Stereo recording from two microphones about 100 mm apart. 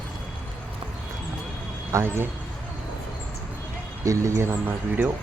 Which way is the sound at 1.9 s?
25° right (ahead or behind).